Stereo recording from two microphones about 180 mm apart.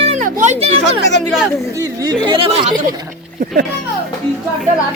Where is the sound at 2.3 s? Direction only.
30° right (ahead or behind).